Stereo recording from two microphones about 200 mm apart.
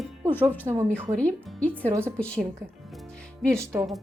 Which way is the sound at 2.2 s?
5° left (ahead or behind).